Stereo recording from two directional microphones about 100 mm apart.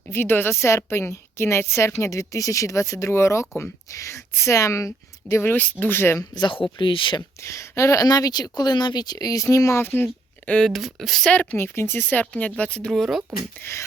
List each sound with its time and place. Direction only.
0.1 s a woman's voice: 20° left (ahead or behind)
5.4 s a woman's voice: 20° left (ahead or behind)
6.1 s speech: 45° left (ahead or behind)
6.5 s speech: 60° left (ahead or behind)
7.4 s speech: 30° left (ahead or behind); by 10.7 s 15° left (ahead or behind)
10.7 s speech: centre (ahead or behind)
11.5 s speech: 25° left (ahead or behind); by 13.4 s centre (ahead or behind)